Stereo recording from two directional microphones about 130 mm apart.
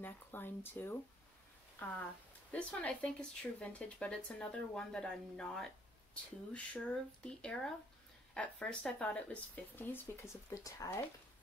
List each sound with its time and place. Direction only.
0.0 s speech: 15° left (ahead or behind)